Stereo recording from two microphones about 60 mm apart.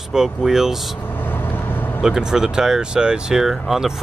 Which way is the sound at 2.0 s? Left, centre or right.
Centre.